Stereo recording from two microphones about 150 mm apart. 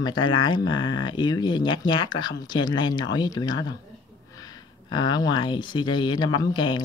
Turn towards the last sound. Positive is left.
turn(degrees=30)  # may be behind; listen again after turning